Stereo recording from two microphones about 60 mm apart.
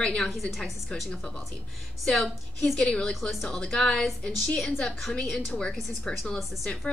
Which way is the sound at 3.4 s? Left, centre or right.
Centre.